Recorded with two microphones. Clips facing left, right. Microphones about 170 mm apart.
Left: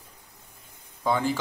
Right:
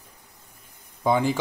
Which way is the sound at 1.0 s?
15° right (ahead or behind).